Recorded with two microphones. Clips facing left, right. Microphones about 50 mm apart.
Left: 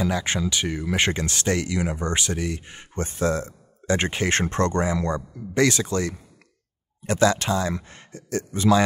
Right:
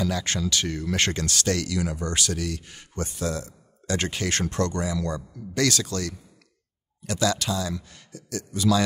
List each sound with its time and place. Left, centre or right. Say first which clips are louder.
0.0 s speech: left 2 dB; left